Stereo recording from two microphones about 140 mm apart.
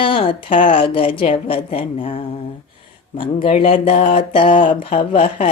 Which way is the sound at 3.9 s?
70° left (ahead or behind).